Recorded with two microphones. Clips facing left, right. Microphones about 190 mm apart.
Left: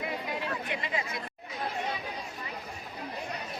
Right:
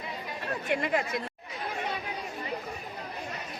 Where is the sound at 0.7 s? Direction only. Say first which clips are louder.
Right 11 dB; 55° right (ahead or behind).